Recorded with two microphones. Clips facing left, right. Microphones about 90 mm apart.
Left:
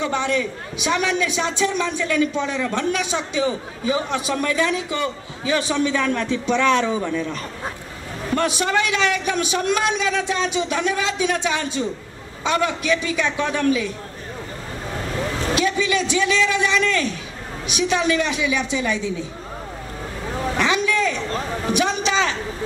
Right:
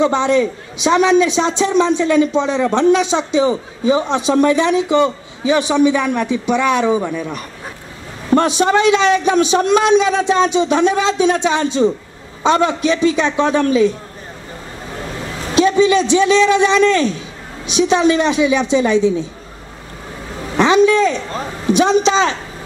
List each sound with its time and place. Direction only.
0.0 s a man's voice: 25° right (ahead or behind)
15.5 s a man's voice: 25° right (ahead or behind)
20.5 s a sound: 25° right (ahead or behind)
21.7 s a man's voice: 25° right (ahead or behind)